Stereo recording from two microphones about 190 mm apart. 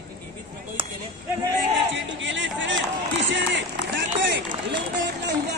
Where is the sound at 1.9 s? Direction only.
75° right (ahead or behind).